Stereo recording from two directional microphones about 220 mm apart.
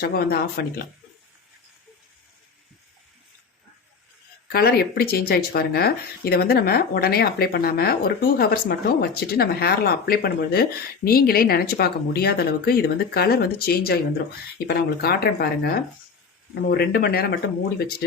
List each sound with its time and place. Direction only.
0.0 s speech: 45° left (ahead or behind)
4.4 s speech: 45° left (ahead or behind)